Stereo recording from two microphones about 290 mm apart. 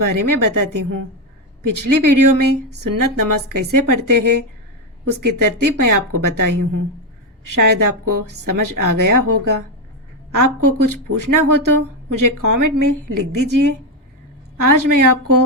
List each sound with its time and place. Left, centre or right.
0.0 s a woman's voice: right